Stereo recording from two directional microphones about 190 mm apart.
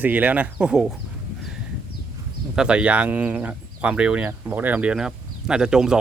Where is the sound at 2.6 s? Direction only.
5° right (ahead or behind).